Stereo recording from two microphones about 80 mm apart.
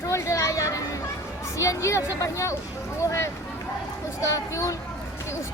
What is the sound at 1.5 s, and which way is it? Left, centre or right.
Speech, left.